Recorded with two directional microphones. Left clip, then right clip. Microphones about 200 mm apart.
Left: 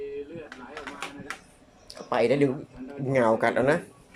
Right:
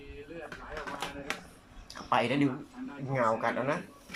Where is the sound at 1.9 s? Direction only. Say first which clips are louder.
Left 5 dB; 25° left (ahead or behind).